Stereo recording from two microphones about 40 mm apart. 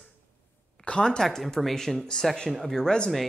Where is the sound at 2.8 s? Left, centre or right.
Centre.